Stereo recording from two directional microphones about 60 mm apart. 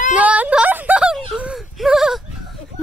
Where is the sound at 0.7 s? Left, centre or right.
Right.